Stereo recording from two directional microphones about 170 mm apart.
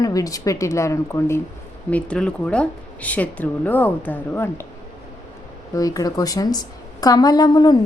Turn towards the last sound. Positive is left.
turn(degrees=25)  # may be behind; listen again after turning